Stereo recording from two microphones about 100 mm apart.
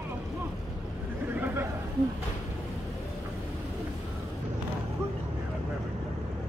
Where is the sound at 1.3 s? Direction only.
20° right (ahead or behind).